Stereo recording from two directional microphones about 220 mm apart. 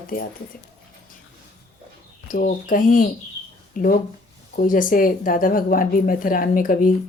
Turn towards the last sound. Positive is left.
turn(degrees=40)  # may be behind; listen again after turning